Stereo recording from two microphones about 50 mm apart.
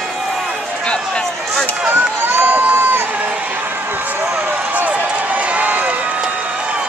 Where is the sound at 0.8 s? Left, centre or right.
Centre.